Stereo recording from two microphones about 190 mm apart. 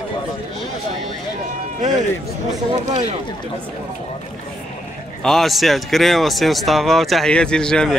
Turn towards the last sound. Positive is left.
turn(degrees=5)  # may be behind; listen again after turning